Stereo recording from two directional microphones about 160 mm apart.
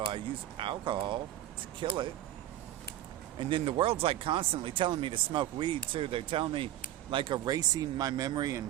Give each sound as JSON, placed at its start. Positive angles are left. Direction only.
{"t": 0.0, "sound": "speech", "side_deg": -35}
{"t": 3.3, "sound": "speech", "side_deg": -35}